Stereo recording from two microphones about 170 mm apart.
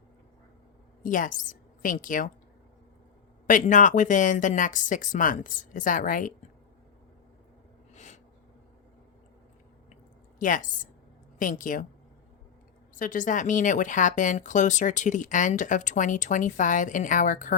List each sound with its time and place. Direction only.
1.0 s a woman's voice: 50° left (ahead or behind)
3.4 s a woman's voice: 50° left (ahead or behind)
7.9 s a sound: 45° left (ahead or behind)
10.4 s a woman's voice: 50° left (ahead or behind)
13.0 s a woman's voice: 50° left (ahead or behind)